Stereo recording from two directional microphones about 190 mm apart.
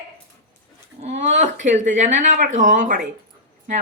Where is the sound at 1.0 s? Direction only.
40° right (ahead or behind).